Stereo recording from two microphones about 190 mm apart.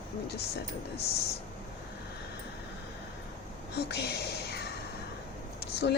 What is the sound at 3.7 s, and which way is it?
Speech, 60° left (ahead or behind).